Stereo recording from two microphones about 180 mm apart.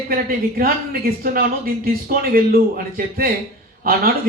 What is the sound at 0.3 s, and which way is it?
Speech, 55° right (ahead or behind).